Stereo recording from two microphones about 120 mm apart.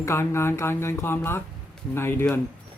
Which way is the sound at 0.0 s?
20° left (ahead or behind).